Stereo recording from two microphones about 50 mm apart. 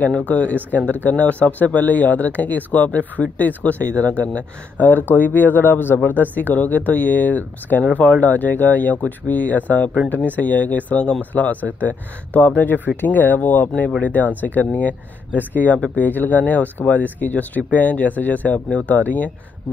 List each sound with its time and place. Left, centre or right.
0.0 s speech: left
6.3 s speech: left